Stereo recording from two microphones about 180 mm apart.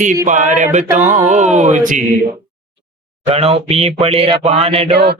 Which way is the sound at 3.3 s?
35° right (ahead or behind).